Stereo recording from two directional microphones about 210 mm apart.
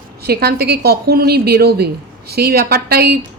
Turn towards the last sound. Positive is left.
turn(degrees=-50)  # may be behind; listen again after turning